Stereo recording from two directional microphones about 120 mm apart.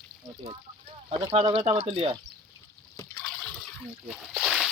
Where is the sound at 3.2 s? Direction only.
Centre (ahead or behind).